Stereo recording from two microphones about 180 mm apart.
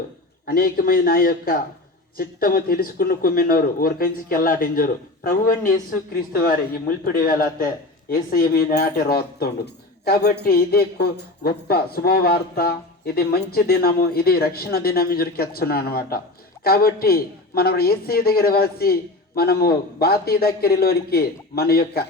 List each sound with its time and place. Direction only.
0.4 s a man's voice: 55° left (ahead or behind)